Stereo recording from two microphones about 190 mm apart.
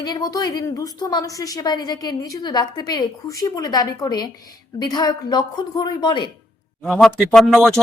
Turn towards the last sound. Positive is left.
turn(degrees=0)  # may be behind; listen again after turning